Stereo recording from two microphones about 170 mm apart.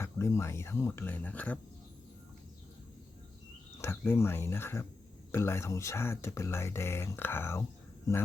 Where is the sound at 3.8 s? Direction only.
15° left (ahead or behind).